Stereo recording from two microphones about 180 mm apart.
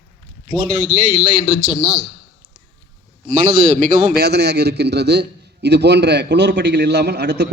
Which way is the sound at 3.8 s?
45° right (ahead or behind).